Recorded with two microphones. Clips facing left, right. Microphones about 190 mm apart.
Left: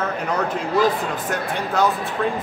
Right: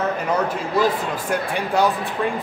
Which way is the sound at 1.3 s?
15° right (ahead or behind).